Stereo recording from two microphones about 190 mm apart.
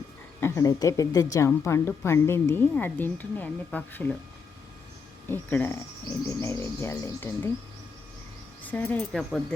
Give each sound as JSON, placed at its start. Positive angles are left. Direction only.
{"t": 0.3, "sound": "a woman's voice", "side_deg": 15}
{"t": 5.3, "sound": "a woman's voice", "side_deg": 10}
{"t": 8.6, "sound": "a woman's voice", "side_deg": 10}